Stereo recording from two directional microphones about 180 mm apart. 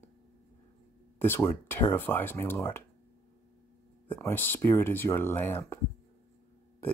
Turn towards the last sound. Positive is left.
turn(degrees=10)  # may be behind; listen again after turning